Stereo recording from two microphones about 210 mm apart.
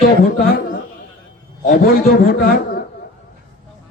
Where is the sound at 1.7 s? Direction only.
45° left (ahead or behind).